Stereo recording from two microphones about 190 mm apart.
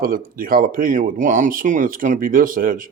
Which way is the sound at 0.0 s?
50° right (ahead or behind).